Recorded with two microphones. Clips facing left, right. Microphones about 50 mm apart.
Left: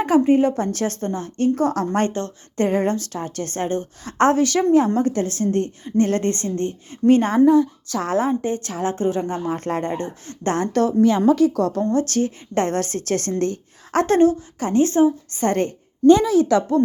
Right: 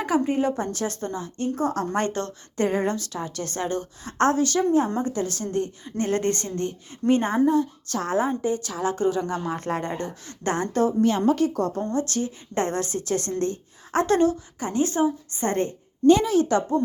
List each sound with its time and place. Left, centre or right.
0.0 s a woman's voice: left
0.6 s a woman's voice: left
1.9 s a woman's voice: left
4.0 s a woman's voice: left
4.9 s a woman's voice: left
5.3 s a woman's voice: left
7.1 s a woman's voice: left
10.5 s a woman's voice: left
11.9 s a woman's voice: left
13.4 s a woman's voice: left
14.6 s a woman's voice: left
15.3 s a woman's voice: left